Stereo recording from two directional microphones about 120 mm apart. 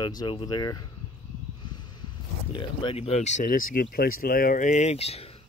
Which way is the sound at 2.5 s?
40° left (ahead or behind).